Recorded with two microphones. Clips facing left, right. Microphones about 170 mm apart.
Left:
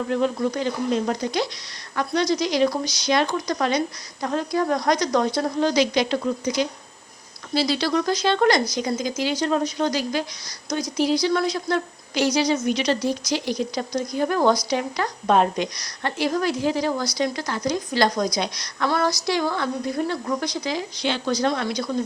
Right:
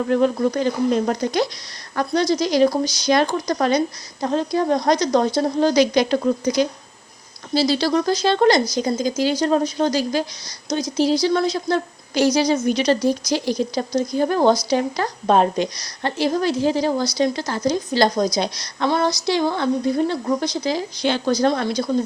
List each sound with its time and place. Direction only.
0.1 s speech: 45° right (ahead or behind)
2.0 s a woman's voice: 35° right (ahead or behind)